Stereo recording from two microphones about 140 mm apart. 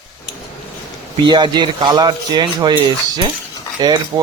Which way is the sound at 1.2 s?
30° right (ahead or behind).